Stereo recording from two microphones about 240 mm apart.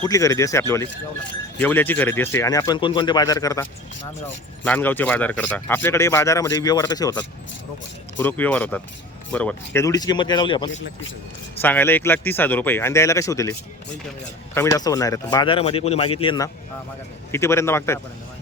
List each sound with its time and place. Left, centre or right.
0.0 s speech: centre
11.6 s speech: centre